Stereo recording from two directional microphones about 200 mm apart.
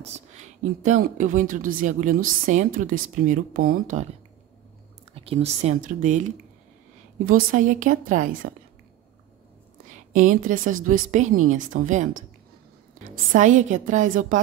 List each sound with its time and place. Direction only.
0.0 s a sound: 35° right (ahead or behind)
1.0 s a woman's voice: 40° right (ahead or behind)
5.1 s a woman's voice: 30° right (ahead or behind)
7.2 s a woman's voice: 45° right (ahead or behind)
10.1 s a woman's voice: 40° right (ahead or behind)
13.1 s a woman's voice: 40° right (ahead or behind)